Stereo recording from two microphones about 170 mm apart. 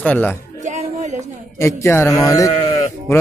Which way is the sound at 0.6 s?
45° right (ahead or behind).